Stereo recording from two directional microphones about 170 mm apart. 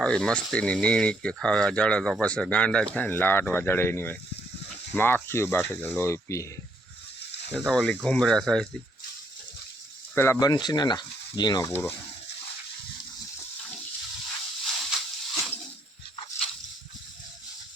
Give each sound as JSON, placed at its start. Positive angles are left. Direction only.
{"t": 0.0, "sound": "speech", "side_deg": 5}
{"t": 7.6, "sound": "speech", "side_deg": 5}
{"t": 10.2, "sound": "speech", "side_deg": 20}
{"t": 11.7, "sound": "speech", "side_deg": 10}
{"t": 14.6, "sound": "a sound", "side_deg": 0}